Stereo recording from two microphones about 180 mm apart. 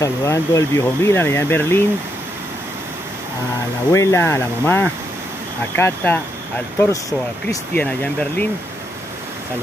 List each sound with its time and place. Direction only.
0.0 s speech: 20° left (ahead or behind)
3.9 s speech: 15° left (ahead or behind)
7.4 s speech: 10° left (ahead or behind)